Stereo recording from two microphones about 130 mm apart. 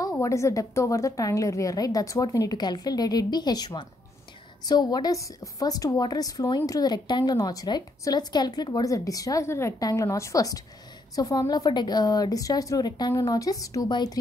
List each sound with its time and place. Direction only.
0.2 s a woman's voice: 25° left (ahead or behind)